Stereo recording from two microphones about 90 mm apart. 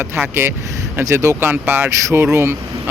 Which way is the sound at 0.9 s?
30° right (ahead or behind).